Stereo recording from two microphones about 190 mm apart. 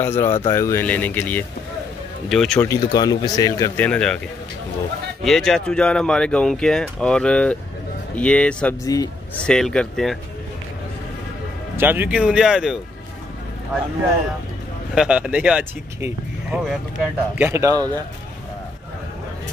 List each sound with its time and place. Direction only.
0.0 s speech: 10° left (ahead or behind)
2.7 s speech: 20° left (ahead or behind); by 4.2 s 5° left (ahead or behind)
5.2 s speech: centre (ahead or behind)
8.8 s speech: 20° left (ahead or behind)
9.4 s speech: 5° left (ahead or behind)
11.7 s speech: 10° right (ahead or behind)
15.0 s a man's voice: 5° right (ahead or behind)